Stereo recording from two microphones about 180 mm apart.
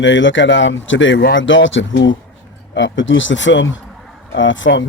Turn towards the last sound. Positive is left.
turn(degrees=90)